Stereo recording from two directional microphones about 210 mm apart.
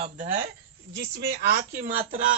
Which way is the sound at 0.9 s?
60° right (ahead or behind).